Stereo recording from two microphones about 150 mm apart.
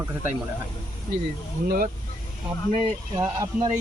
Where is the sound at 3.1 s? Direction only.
25° right (ahead or behind).